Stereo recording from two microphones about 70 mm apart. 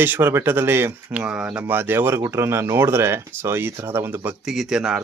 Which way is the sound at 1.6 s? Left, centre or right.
Right.